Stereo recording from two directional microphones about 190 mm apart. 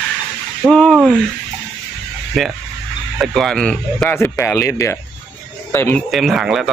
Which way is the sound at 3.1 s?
Centre (ahead or behind).